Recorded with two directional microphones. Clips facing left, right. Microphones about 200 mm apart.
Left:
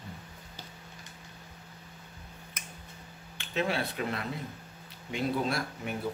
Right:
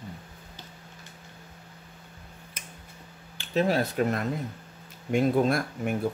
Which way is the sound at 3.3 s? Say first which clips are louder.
Right 6 dB; 40° right (ahead or behind).